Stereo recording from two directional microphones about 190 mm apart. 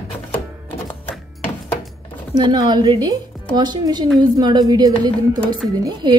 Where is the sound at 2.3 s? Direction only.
20° right (ahead or behind).